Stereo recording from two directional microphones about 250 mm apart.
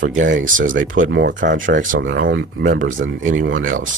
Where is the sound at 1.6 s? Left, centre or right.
Right.